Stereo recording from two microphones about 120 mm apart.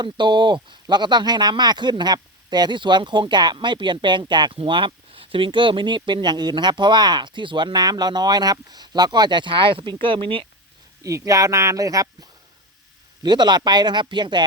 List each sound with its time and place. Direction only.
0.0 s speech: 40° right (ahead or behind)
11.0 s speech: 25° right (ahead or behind)